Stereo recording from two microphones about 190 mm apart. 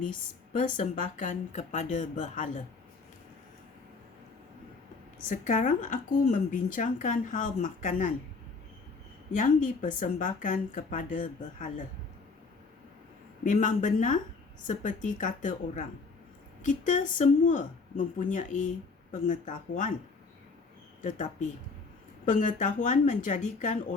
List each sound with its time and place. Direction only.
0.0 s speech: 45° left (ahead or behind)
5.3 s a woman's voice: 40° left (ahead or behind)
9.3 s a woman's voice: 45° left (ahead or behind)
13.4 s a woman's voice: 40° left (ahead or behind)
21.0 s a woman's voice: 40° left (ahead or behind)